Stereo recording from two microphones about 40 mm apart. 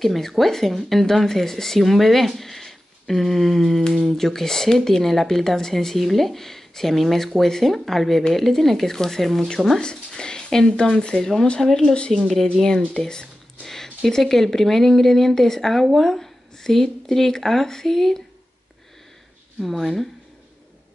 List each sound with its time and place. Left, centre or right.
0.0 s speech: centre
9.8 s speech: left
11.1 s speech: centre
19.6 s speech: centre